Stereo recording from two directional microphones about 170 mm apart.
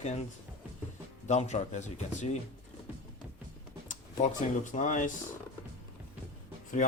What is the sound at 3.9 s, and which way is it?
Speech, 50° left (ahead or behind).